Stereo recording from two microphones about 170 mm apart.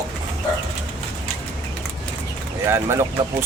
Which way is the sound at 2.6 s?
15° right (ahead or behind).